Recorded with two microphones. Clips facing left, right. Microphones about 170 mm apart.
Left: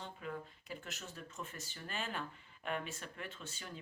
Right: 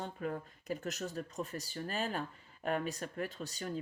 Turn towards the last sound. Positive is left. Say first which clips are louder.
# right 8 dB
turn(degrees=-40)  # may be behind; listen again after turning